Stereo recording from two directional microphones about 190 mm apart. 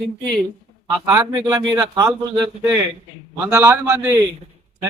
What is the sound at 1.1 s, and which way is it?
Speech, 15° right (ahead or behind).